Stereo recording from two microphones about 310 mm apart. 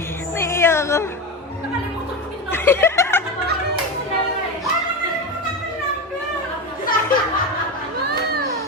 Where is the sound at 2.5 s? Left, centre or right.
Centre.